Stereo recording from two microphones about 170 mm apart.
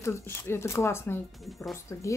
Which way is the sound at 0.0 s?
15° left (ahead or behind).